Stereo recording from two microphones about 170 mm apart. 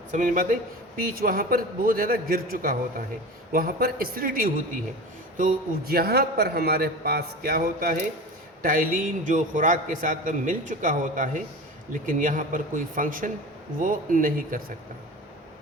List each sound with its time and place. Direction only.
0.1 s a man's voice: 50° right (ahead or behind)